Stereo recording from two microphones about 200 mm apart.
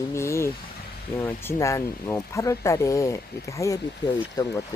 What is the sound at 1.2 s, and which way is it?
Speech, 10° left (ahead or behind).